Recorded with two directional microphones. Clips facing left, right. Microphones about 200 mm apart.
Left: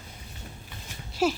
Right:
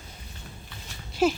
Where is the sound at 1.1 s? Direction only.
Centre (ahead or behind).